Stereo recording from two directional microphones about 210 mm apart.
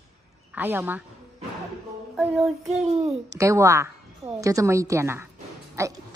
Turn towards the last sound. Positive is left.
turn(degrees=-15)  # may be behind; listen again after turning